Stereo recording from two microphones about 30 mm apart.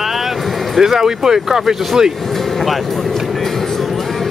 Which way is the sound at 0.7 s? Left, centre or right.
Centre.